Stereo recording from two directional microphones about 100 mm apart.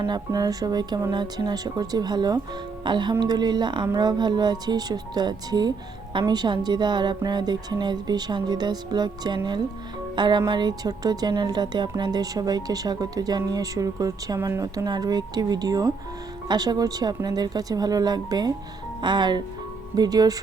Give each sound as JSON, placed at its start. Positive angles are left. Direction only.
{"t": 0.0, "sound": "a woman's voice", "side_deg": -45}
{"t": 14.3, "sound": "speech", "side_deg": -25}
{"t": 14.6, "sound": "a woman's voice", "side_deg": -40}